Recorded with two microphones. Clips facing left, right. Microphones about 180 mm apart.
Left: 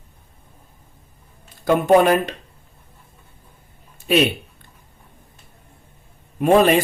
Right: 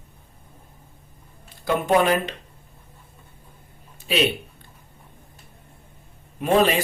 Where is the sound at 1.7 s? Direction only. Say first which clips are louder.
Left 5 dB; 50° left (ahead or behind).